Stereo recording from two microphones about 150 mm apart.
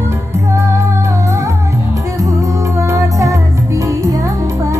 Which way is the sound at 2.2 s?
20° right (ahead or behind).